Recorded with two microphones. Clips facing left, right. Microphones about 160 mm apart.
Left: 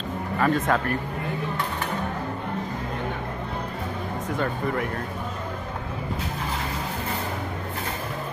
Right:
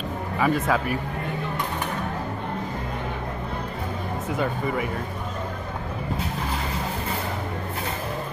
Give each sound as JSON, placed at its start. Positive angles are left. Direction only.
{"t": 0.4, "sound": "speech", "side_deg": -5}
{"t": 4.4, "sound": "speech", "side_deg": -5}